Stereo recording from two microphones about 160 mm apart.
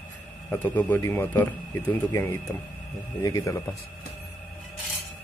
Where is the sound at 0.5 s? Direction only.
10° left (ahead or behind).